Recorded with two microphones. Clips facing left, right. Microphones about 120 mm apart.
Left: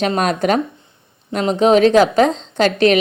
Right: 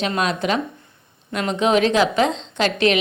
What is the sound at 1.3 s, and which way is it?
A woman's voice, 35° left (ahead or behind).